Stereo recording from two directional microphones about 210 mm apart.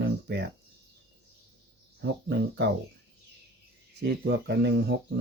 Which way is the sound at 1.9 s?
55° right (ahead or behind).